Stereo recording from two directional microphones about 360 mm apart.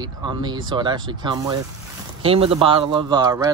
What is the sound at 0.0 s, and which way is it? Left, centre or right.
A man's voice, centre.